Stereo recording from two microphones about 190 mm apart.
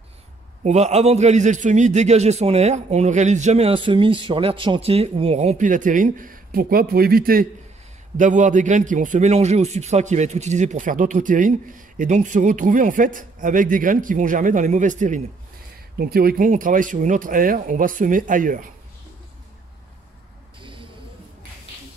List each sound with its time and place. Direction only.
0.7 s a man's voice: 35° right (ahead or behind)
16.0 s a man's voice: 50° right (ahead or behind)